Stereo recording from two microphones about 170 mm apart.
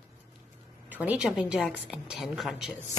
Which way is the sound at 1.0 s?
5° right (ahead or behind).